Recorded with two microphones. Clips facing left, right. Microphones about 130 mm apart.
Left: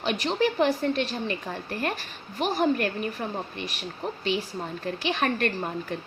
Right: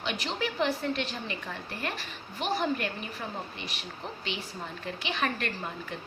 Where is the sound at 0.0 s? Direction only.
40° left (ahead or behind).